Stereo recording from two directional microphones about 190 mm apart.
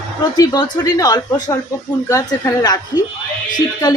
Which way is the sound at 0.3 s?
20° left (ahead or behind).